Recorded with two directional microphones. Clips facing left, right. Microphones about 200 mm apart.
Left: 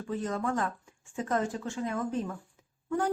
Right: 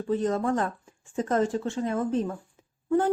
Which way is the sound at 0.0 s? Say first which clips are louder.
Right 6 dB; 35° right (ahead or behind).